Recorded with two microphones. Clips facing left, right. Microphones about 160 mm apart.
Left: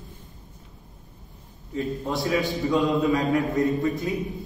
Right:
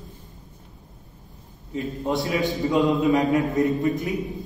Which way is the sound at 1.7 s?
20° right (ahead or behind).